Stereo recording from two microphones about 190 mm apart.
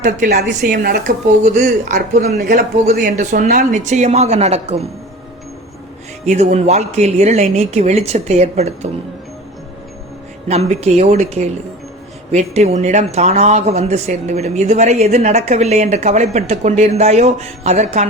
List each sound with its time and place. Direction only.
0.0 s a woman's voice: 40° right (ahead or behind)
6.2 s speech: 35° right (ahead or behind)
10.5 s speech: 35° right (ahead or behind)